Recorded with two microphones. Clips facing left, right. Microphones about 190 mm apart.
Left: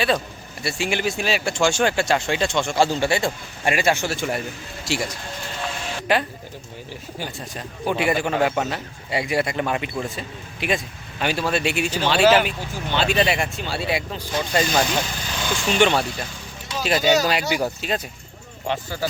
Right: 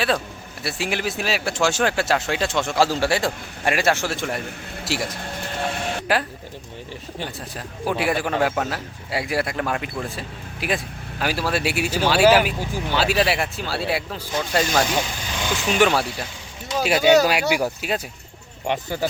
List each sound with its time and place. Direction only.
0.6 s a man's voice: centre (ahead or behind)
5.6 s a sound: 55° right (ahead or behind)
7.2 s a man's voice: centre (ahead or behind)
14.5 s speech: 10° left (ahead or behind)
15.4 s a man's voice: 5° right (ahead or behind)